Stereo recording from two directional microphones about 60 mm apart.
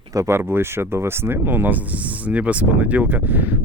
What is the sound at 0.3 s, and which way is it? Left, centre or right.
Speech, right.